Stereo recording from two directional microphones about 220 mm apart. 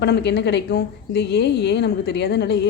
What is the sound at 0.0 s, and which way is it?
A woman's voice, 50° left (ahead or behind).